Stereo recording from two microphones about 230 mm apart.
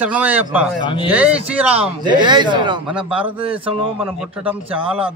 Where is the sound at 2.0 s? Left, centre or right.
Centre.